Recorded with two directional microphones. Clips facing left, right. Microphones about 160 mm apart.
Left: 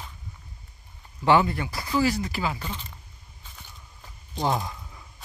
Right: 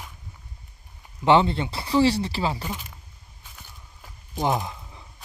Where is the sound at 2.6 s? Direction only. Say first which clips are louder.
Right 3 dB; 10° right (ahead or behind).